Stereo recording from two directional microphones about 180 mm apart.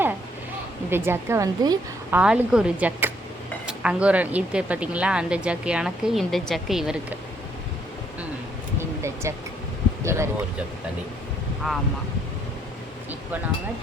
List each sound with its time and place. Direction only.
0.9 s speech: 10° right (ahead or behind)
2.0 s speech: 5° right (ahead or behind)
8.8 s air conditioning: 15° right (ahead or behind)
10.0 s speech: 15° right (ahead or behind)
11.6 s speech: centre (ahead or behind)